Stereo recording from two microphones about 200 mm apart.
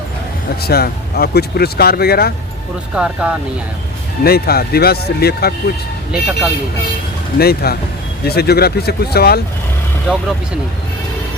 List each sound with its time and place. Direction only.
0.6 s speech: 50° left (ahead or behind)
2.9 s speech: 5° right (ahead or behind)
4.2 s speech: 50° left (ahead or behind)
7.3 s speech: 50° left (ahead or behind)
10.1 s speech: 5° right (ahead or behind)